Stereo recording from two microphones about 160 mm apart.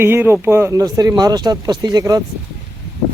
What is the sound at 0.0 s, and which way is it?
Speech, 15° right (ahead or behind).